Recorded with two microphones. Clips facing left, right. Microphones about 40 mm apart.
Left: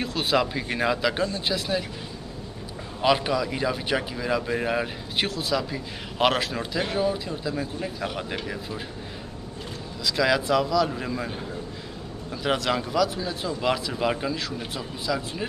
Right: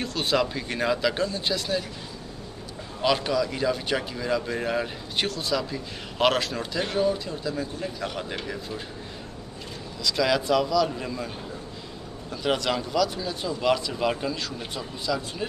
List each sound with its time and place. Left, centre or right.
0.0 s speech: centre
3.0 s speech: centre
10.0 s speech: centre
12.4 s speech: centre